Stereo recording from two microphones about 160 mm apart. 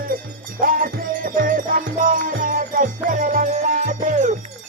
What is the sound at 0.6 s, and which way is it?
Music, 60° right (ahead or behind).